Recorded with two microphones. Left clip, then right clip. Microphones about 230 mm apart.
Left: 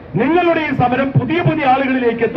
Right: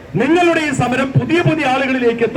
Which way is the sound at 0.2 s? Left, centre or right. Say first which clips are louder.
Right 1 dB; right.